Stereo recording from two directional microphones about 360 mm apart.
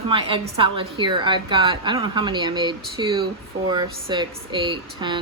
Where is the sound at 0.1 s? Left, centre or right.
Centre.